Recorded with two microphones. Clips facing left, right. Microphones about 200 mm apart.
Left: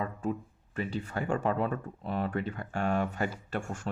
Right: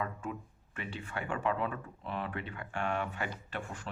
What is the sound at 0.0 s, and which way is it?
Speech, 35° left (ahead or behind).